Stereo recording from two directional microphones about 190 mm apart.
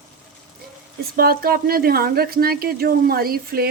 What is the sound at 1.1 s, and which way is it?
A woman's voice, 50° right (ahead or behind).